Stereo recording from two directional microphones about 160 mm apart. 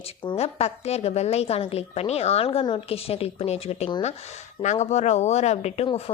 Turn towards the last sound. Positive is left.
turn(degrees=40)  # may be behind; listen again after turning